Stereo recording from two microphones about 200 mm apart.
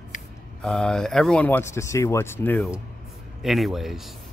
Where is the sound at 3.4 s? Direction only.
Centre (ahead or behind).